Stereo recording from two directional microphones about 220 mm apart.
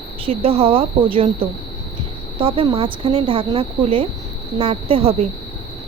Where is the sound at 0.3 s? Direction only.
25° right (ahead or behind).